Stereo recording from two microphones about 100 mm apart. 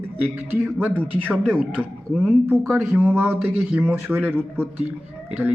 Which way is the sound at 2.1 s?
Centre (ahead or behind).